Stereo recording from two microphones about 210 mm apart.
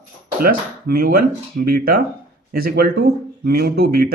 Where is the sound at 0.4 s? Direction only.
45° right (ahead or behind).